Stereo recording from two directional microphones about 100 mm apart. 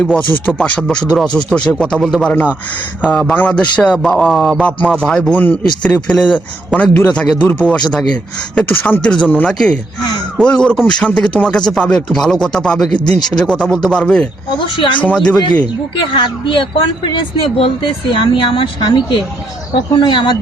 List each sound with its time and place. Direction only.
0.0 s speech: 10° left (ahead or behind)
5.3 s speech: 20° left (ahead or behind)
14.5 s speech: 55° left (ahead or behind)
15.0 s speech: 10° left (ahead or behind)
15.6 s speech: 55° left (ahead or behind)